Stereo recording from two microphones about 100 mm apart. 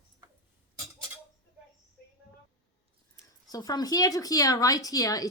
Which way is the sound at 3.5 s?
40° left (ahead or behind).